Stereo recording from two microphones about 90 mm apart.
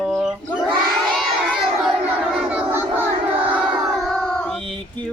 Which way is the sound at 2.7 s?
25° right (ahead or behind).